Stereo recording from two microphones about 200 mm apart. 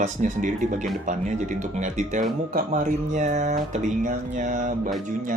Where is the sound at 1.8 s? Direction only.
40° right (ahead or behind).